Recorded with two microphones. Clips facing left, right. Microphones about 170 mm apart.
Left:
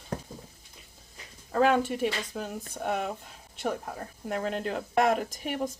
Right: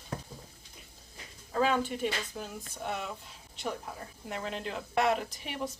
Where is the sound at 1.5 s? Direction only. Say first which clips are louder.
Left 5 dB; 60° left (ahead or behind).